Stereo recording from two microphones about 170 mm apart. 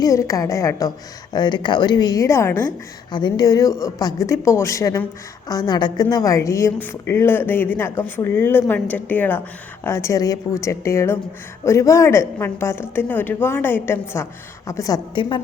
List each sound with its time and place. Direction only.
0.0 s a woman's voice: 20° left (ahead or behind)
3.1 s a woman's voice: 25° left (ahead or behind)